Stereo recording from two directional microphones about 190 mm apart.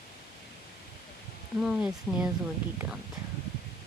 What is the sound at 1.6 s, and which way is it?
Speech, 5° right (ahead or behind).